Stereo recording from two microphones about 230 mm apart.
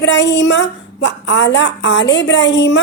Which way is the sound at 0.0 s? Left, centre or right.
Left.